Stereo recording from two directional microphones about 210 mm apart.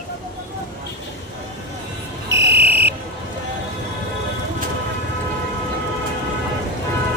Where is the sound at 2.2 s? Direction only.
55° right (ahead or behind).